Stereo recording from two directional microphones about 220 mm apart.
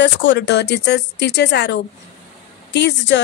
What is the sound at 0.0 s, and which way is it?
A woman's voice, 55° left (ahead or behind).